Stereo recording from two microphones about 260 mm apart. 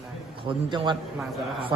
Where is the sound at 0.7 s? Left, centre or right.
Centre.